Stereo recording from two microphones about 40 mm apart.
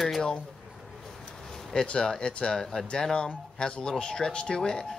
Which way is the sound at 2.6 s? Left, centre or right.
Centre.